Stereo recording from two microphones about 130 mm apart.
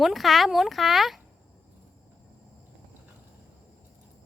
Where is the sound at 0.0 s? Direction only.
Centre (ahead or behind).